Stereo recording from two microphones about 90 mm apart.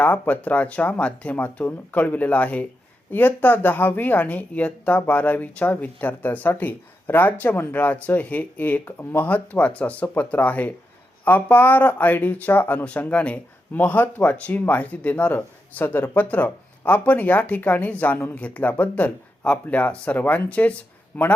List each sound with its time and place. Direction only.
0.0 s speech: 20° left (ahead or behind)